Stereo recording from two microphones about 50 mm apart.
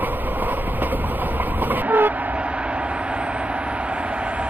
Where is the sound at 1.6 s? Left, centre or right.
Right.